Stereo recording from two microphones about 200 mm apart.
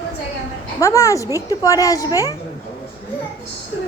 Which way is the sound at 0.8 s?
15° left (ahead or behind).